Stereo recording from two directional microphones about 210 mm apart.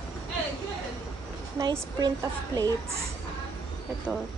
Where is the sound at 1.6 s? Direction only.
20° right (ahead or behind).